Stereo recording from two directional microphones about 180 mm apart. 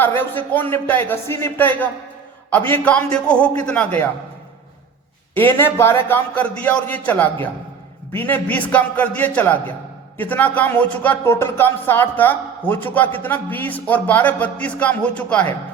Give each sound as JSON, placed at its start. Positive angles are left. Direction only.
{"t": 0.2, "sound": "speech", "side_deg": 10}
{"t": 5.3, "sound": "speech", "side_deg": 10}